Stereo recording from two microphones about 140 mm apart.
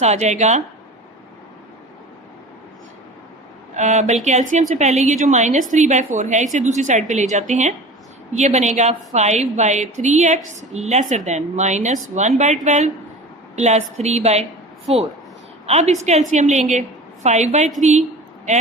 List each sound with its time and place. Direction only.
0.0 s speech: 55° right (ahead or behind)
3.8 s a woman's voice: 55° right (ahead or behind)
15.6 s a woman's voice: 55° right (ahead or behind)